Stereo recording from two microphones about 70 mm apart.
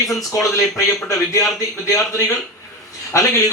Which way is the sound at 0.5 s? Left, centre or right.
Left.